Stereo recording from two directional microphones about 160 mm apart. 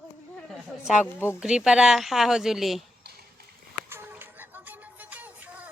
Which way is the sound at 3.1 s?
90° right.